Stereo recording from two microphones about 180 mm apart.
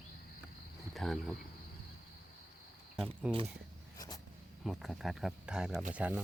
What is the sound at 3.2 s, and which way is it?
Speech, 5° right (ahead or behind).